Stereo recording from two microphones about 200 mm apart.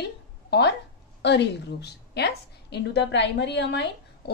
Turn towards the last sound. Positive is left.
turn(degrees=60)  # may be behind; listen again after turning